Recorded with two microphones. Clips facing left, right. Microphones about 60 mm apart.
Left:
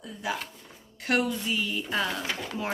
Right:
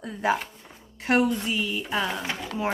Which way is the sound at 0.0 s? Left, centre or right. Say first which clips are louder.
Right 8 dB; right.